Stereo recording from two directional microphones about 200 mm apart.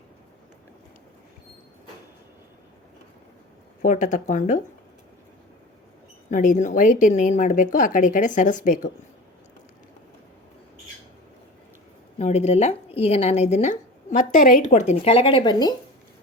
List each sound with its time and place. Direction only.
3.8 s speech: 40° left (ahead or behind)
6.3 s speech: 40° left (ahead or behind)
12.2 s speech: 35° left (ahead or behind)